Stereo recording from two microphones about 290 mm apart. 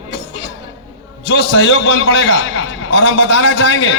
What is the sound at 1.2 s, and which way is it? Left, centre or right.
A man's voice, left.